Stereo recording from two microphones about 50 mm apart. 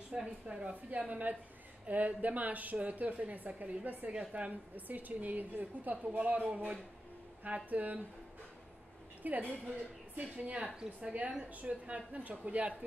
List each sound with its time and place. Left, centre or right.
0.1 s a woman's voice: right
4.1 s a woman's voice: right
9.2 s a woman's voice: right
10.8 s a woman's voice: right